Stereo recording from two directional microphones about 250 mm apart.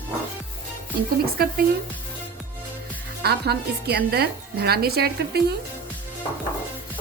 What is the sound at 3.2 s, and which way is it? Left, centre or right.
A woman's voice, right.